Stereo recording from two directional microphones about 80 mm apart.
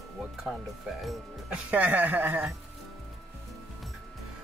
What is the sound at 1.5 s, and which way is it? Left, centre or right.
Speech, centre.